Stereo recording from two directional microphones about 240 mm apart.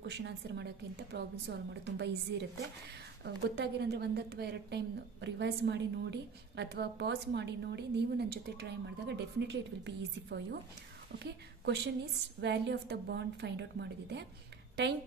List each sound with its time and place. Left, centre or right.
0.0 s a woman's voice: right